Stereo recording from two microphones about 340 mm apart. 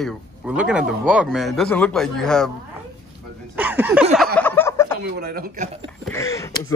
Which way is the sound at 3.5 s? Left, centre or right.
Centre.